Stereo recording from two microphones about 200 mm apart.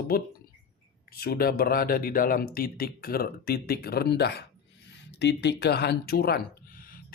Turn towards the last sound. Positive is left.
turn(degrees=45)  # may be behind; listen again after turning